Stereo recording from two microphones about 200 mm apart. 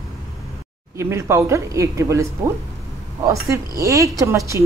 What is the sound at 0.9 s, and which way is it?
Speech, 15° right (ahead or behind).